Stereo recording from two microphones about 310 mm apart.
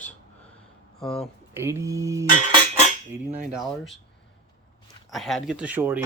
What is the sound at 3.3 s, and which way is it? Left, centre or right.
Speech, right.